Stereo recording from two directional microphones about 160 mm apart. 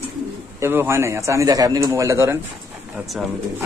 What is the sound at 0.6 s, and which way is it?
A man's voice, 15° right (ahead or behind).